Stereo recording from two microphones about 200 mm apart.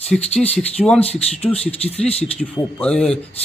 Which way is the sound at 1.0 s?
30° left (ahead or behind).